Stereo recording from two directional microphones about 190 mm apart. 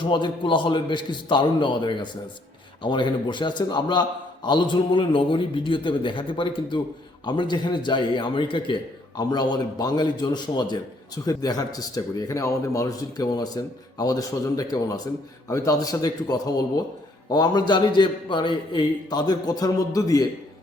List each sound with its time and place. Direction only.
0.0 s a man's voice: 25° left (ahead or behind)